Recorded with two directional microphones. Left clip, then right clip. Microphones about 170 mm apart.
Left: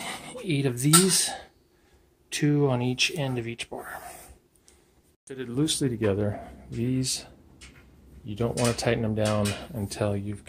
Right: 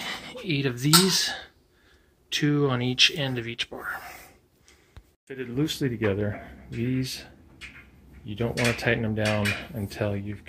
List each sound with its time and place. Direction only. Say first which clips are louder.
0.0 s a sound: right 1 dB; 10° left (ahead or behind)
1.0 s speech: right 2 dB; 10° left (ahead or behind)
5.3 s speech: left 1 dB; 5° left (ahead or behind)
8.3 s speech: right 1 dB; 5° left (ahead or behind)